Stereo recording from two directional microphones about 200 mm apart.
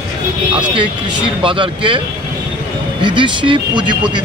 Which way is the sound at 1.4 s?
25° right (ahead or behind).